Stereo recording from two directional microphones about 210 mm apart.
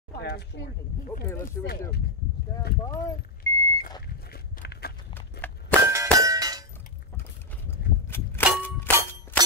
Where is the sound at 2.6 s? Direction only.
45° left (ahead or behind).